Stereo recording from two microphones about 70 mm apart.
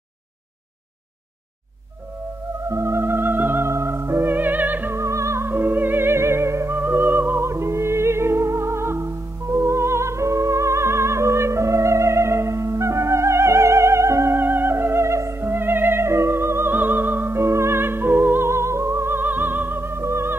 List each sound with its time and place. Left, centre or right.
2.7 s music: right
4.9 s music: right
6.8 s music: right